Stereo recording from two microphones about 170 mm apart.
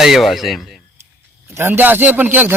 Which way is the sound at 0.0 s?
Centre (ahead or behind).